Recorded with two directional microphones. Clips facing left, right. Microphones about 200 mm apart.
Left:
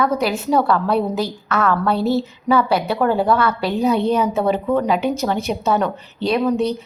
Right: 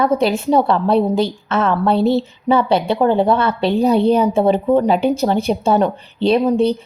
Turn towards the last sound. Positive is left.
turn(degrees=-30)  # may be behind; listen again after turning